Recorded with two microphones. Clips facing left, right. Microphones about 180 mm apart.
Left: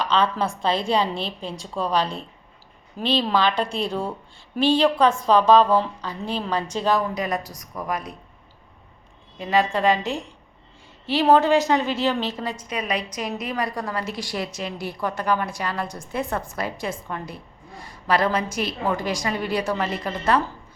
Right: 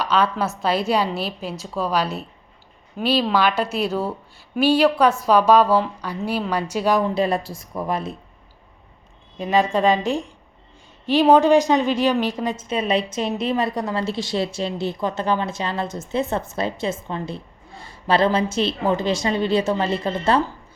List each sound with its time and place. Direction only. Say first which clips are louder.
0.0 s a woman's voice: right 1 dB; 5° right (ahead or behind)
7.1 s a woman's voice: right 5 dB; 30° right (ahead or behind)
9.4 s a woman's voice: right 2 dB; 20° right (ahead or behind)